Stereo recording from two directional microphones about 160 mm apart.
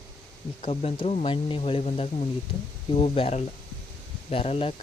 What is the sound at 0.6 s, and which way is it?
Speech, 35° left (ahead or behind).